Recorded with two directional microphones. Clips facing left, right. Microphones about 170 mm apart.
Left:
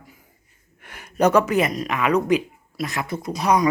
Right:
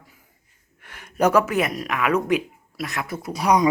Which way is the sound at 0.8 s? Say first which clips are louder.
Left 3 dB; 15° left (ahead or behind).